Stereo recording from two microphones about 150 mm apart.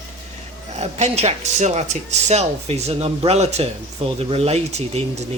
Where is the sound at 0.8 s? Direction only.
45° right (ahead or behind).